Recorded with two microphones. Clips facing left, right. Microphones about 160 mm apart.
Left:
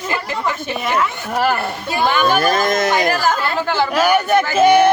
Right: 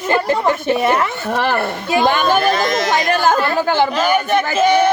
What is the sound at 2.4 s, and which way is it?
Speech, 45° left (ahead or behind).